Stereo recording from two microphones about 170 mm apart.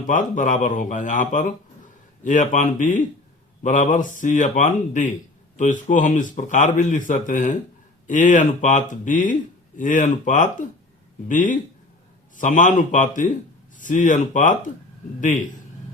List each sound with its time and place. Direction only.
0.1 s speech: 50° left (ahead or behind)